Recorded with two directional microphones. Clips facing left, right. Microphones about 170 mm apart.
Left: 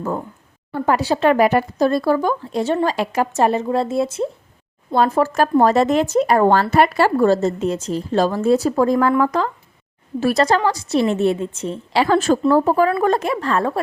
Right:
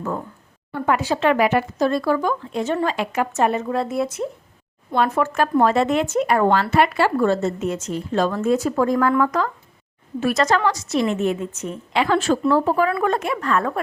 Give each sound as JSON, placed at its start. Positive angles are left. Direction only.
{"t": 0.7, "sound": "speech", "side_deg": 35}